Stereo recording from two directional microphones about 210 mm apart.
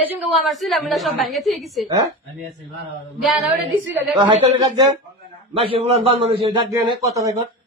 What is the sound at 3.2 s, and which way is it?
A woman's voice, 10° right (ahead or behind).